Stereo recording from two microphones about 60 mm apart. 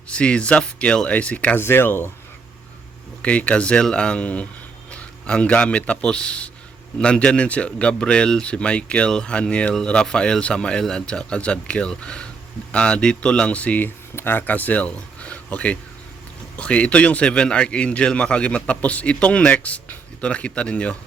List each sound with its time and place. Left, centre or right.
0.1 s speech: centre
1.5 s speech: left
3.2 s a man's voice: left